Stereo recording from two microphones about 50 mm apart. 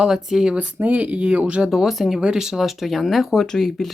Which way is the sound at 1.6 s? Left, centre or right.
Centre.